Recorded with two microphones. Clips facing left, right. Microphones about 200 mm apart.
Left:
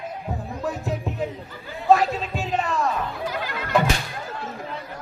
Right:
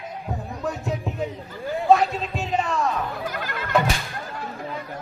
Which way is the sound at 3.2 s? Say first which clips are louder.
Left 1 dB; 50° right (ahead or behind).